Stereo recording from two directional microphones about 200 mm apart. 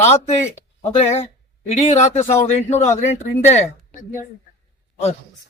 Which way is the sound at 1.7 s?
35° left (ahead or behind).